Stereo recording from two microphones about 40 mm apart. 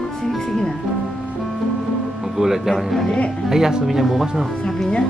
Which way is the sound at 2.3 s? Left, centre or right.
Centre.